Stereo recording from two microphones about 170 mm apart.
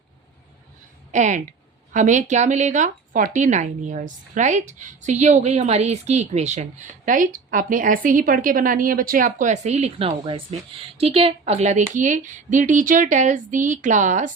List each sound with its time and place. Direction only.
1.1 s a woman's voice: 45° right (ahead or behind)